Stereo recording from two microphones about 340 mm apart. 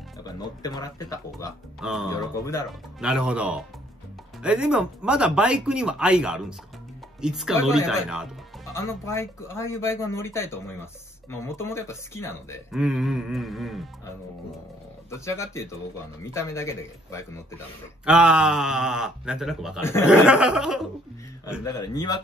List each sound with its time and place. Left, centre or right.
0.4 s speech: centre
1.8 s speech: centre
2.0 s speech: centre
3.0 s speech: centre
8.7 s speech: centre
15.0 s speech: centre
18.0 s speech: centre
21.6 s speech: centre